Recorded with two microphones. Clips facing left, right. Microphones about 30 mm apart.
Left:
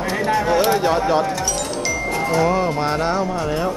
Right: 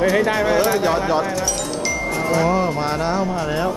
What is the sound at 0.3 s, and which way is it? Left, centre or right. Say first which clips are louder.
Speech: even; centre.